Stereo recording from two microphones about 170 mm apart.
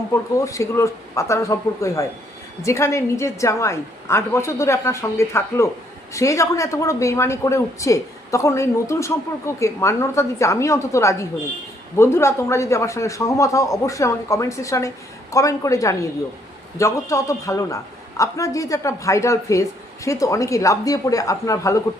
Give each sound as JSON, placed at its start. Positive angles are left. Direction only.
{"t": 0.1, "sound": "a man's voice", "side_deg": 20}